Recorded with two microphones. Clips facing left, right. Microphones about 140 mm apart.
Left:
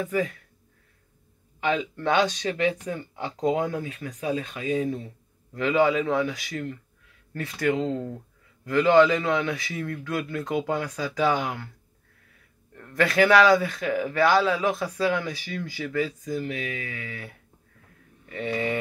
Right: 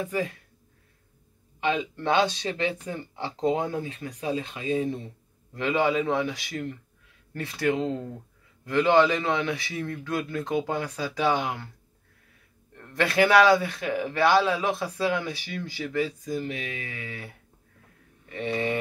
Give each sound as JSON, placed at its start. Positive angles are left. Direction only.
{"t": 0.0, "sound": "speech", "side_deg": -30}
{"t": 1.6, "sound": "a man's voice", "side_deg": -25}
{"t": 12.7, "sound": "a man's voice", "side_deg": -25}
{"t": 18.3, "sound": "a man's voice", "side_deg": -25}